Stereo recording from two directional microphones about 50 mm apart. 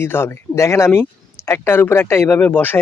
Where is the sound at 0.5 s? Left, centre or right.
Left.